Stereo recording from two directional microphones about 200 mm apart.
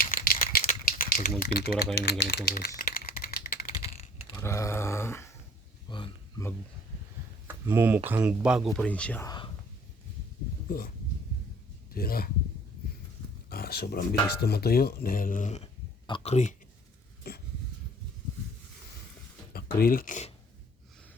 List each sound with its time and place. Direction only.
0.0 s rattle: 45° left (ahead or behind)
1.4 s speech: 50° left (ahead or behind)
2.0 s typing: 55° left (ahead or behind)
4.3 s a sound: 15° left (ahead or behind)
7.4 s speech: 10° right (ahead or behind); by 9.2 s 5° left (ahead or behind)
9.2 s whispering: 20° left (ahead or behind)
11.9 s speech: 45° left (ahead or behind)
13.5 s speech: 50° left (ahead or behind); by 16.6 s 35° left (ahead or behind)
17.2 s a sound: 50° left (ahead or behind)
19.5 s speech: 50° left (ahead or behind)